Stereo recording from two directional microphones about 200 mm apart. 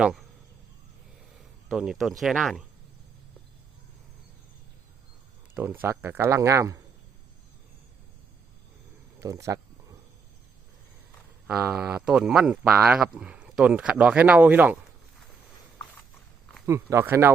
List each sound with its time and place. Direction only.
0.0 s speech: centre (ahead or behind)
1.7 s speech: centre (ahead or behind)
5.5 s speech: 10° right (ahead or behind)
9.1 s speech: 15° right (ahead or behind)
11.4 s speech: 5° right (ahead or behind)
16.6 s speech: 15° right (ahead or behind)